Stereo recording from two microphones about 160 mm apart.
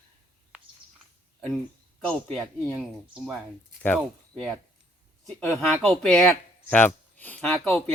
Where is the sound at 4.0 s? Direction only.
5° left (ahead or behind).